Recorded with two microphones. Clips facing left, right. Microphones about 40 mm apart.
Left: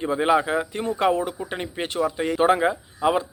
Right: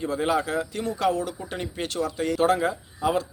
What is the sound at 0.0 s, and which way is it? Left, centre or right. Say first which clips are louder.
Speech: left 4 dB; left.